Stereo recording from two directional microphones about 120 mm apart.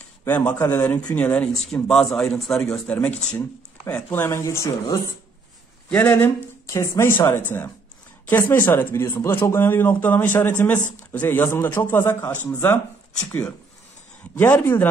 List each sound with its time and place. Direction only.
0.2 s speech: 15° left (ahead or behind)
1.7 s a man's voice: centre (ahead or behind)
3.3 s speech: 20° left (ahead or behind)
5.9 s speech: 15° left (ahead or behind)
14.4 s speech: 20° left (ahead or behind)